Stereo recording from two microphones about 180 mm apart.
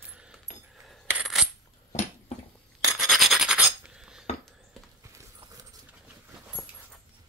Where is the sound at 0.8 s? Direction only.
Centre (ahead or behind).